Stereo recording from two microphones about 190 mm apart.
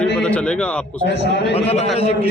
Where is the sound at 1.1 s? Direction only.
65° left (ahead or behind).